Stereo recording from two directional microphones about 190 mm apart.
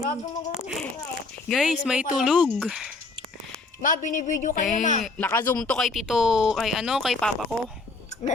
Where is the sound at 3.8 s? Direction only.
45° left (ahead or behind).